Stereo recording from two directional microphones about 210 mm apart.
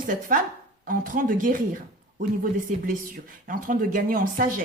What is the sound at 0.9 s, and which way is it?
Speech, 40° right (ahead or behind).